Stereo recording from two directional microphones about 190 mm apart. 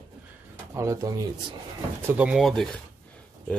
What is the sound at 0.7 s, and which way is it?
Speech, 15° right (ahead or behind).